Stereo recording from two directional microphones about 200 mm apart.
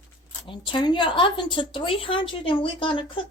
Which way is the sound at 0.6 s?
25° left (ahead or behind).